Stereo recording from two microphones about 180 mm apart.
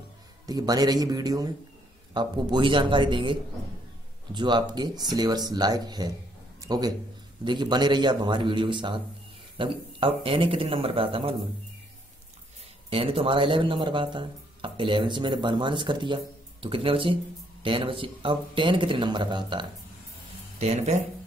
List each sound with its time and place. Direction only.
0.5 s a man's voice: 20° right (ahead or behind)
12.9 s speech: 30° right (ahead or behind)
20.5 s speech: 40° right (ahead or behind)